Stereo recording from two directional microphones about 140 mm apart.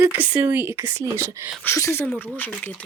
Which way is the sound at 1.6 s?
20° left (ahead or behind).